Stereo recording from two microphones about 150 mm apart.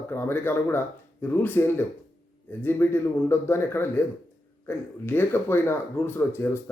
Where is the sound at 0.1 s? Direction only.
15° left (ahead or behind).